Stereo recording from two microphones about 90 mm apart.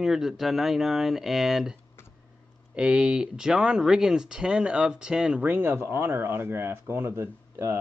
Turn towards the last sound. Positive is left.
turn(degrees=-30)  # may be behind; listen again after turning